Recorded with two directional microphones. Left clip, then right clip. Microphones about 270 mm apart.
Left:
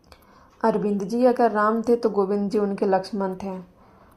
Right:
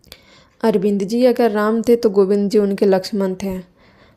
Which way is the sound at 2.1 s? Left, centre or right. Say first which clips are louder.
Right 8 dB; right.